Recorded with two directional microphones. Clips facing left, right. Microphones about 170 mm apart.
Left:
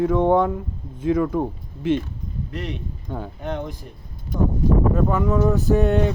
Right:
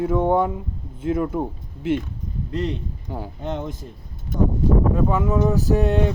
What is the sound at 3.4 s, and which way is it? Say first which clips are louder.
Speech: right 1 dB; 25° right (ahead or behind).